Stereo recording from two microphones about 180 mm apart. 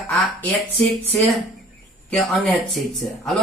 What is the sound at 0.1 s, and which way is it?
Speech, 5° left (ahead or behind).